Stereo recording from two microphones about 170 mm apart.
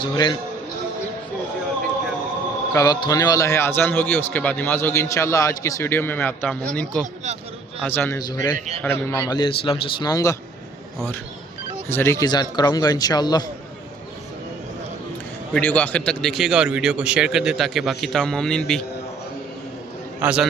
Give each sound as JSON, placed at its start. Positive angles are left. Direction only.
{"t": 0.0, "sound": "a man's voice", "side_deg": 25}
{"t": 2.7, "sound": "a man's voice", "side_deg": 25}
{"t": 8.5, "sound": "a man's voice", "side_deg": -40}
{"t": 8.8, "sound": "a man's voice", "side_deg": 10}
{"t": 11.9, "sound": "a man's voice", "side_deg": 15}
{"t": 15.5, "sound": "a man's voice", "side_deg": 10}
{"t": 20.2, "sound": "a man's voice", "side_deg": -5}